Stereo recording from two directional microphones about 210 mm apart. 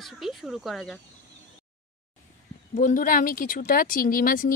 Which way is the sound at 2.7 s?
40° left (ahead or behind).